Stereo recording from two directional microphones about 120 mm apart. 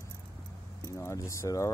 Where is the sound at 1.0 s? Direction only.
25° left (ahead or behind).